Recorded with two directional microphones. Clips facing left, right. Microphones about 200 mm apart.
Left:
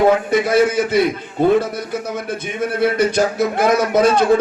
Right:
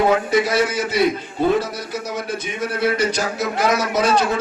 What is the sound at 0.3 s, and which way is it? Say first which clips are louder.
A man's voice: left 3 dB; 55° left (ahead or behind).